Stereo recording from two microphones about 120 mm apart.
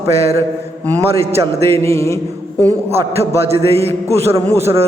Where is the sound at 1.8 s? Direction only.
25° left (ahead or behind).